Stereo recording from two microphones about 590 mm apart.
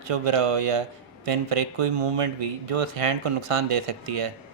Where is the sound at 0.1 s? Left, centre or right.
Right.